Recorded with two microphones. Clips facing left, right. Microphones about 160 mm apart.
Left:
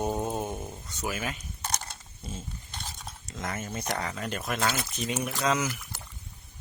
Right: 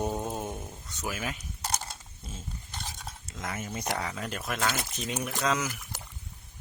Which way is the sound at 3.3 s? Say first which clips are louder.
Left 2 dB; 5° right (ahead or behind).